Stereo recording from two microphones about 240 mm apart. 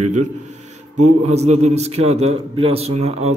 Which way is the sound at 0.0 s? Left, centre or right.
Right.